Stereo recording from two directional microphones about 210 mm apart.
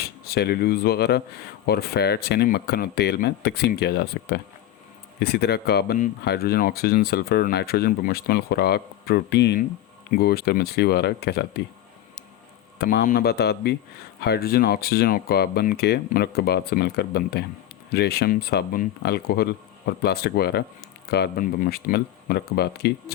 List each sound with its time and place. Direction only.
0.0 s speech: 50° left (ahead or behind)
12.8 s speech: 45° left (ahead or behind)